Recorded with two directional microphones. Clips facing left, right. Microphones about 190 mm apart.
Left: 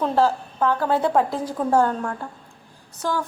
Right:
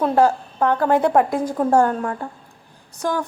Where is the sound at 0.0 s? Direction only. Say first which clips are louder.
Right 3 dB; 15° right (ahead or behind).